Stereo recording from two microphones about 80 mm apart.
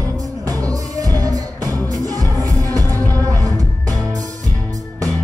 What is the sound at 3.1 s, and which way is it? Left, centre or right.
Music, right.